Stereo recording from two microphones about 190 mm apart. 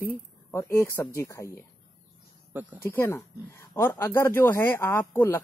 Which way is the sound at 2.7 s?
10° left (ahead or behind).